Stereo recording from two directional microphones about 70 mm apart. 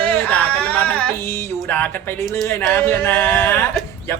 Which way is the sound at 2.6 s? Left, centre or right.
Left.